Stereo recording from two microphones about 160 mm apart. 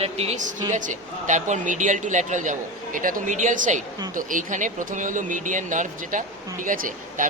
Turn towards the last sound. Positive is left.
turn(degrees=-55)  # may be behind; listen again after turning